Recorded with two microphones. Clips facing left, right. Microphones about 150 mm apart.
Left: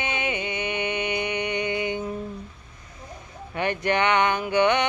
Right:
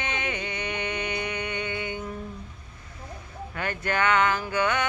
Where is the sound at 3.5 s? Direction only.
20° left (ahead or behind).